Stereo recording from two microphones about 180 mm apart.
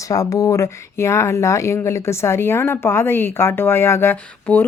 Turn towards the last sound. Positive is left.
turn(degrees=10)  # may be behind; listen again after turning